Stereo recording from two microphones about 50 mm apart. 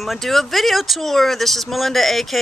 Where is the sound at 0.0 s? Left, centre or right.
Centre.